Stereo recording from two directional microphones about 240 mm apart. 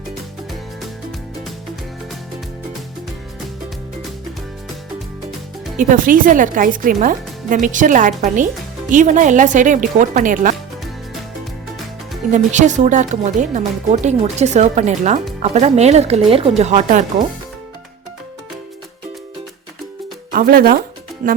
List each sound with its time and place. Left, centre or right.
5.7 s speech: right
12.3 s speech: right
20.3 s speech: right